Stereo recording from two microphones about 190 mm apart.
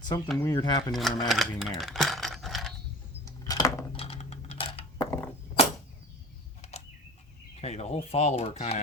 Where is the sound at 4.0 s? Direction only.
30° left (ahead or behind).